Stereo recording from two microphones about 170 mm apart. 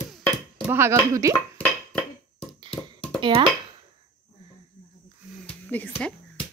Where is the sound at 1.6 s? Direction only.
Centre (ahead or behind).